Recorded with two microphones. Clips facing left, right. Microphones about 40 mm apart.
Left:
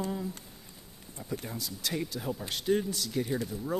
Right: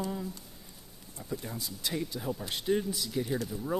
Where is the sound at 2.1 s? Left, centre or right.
Centre.